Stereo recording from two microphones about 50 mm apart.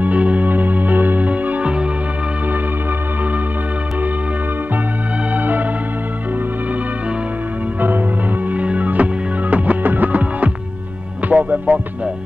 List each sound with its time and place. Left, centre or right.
0.0 s music: right
5.3 s organ: right
8.5 s music: right